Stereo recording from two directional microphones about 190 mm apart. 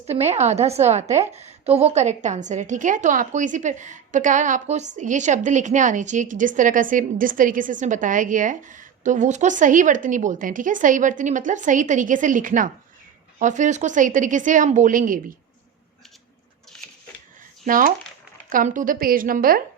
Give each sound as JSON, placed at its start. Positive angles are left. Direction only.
{"t": 0.1, "sound": "a woman's voice", "side_deg": -35}
{"t": 17.7, "sound": "a woman's voice", "side_deg": -45}